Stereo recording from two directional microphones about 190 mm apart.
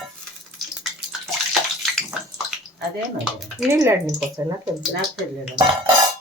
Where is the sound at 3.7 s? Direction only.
15° right (ahead or behind).